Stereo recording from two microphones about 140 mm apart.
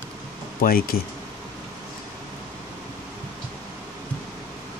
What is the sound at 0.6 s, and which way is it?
Speech, 90° left.